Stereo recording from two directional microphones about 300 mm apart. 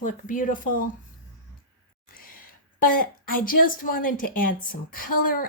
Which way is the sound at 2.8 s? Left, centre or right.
Left.